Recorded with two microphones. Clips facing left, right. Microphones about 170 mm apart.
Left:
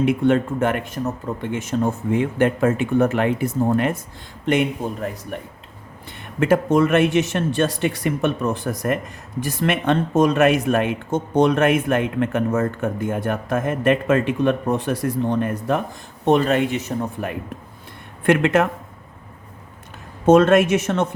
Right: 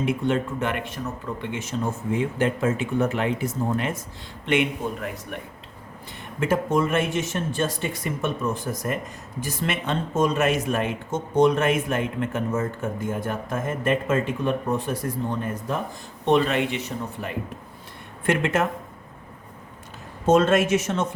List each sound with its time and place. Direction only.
0.0 s speech: 60° left (ahead or behind)
4.4 s a man's voice: 40° left (ahead or behind)
6.4 s speech: 70° left (ahead or behind)
16.2 s speech: 45° left (ahead or behind)
18.3 s speech: 60° left (ahead or behind)
20.2 s speech: 55° left (ahead or behind)